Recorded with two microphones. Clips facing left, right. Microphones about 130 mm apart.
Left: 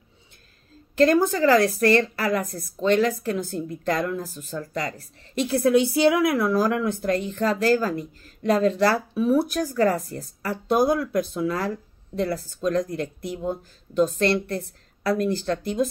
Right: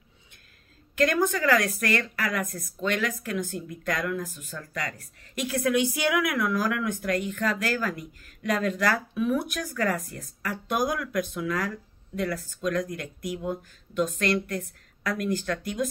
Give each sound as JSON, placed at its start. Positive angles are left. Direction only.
{"t": 0.9, "sound": "a woman's voice", "side_deg": 30}